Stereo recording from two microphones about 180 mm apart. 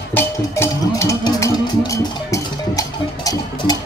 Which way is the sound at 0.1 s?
15° left (ahead or behind).